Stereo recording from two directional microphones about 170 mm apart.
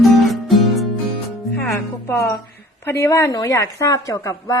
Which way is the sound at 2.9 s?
15° left (ahead or behind).